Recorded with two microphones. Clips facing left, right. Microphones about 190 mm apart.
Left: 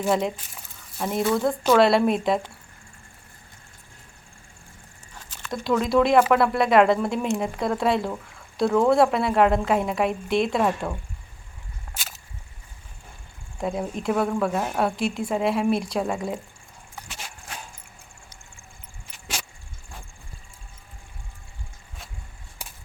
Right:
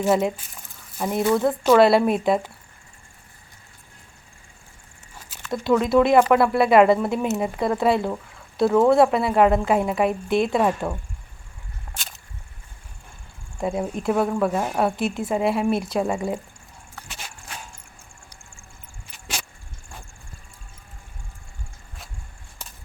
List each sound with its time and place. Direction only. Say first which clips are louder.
0.0 s speech: right 3 dB; 5° right (ahead or behind)
5.5 s speech: right 3 dB; centre (ahead or behind)
11.9 s a sound: left 1 dB; 5° left (ahead or behind)
13.6 s speech: right 2 dB; centre (ahead or behind)